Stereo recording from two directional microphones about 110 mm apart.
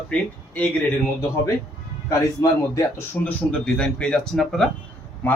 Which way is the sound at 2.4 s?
35° left (ahead or behind).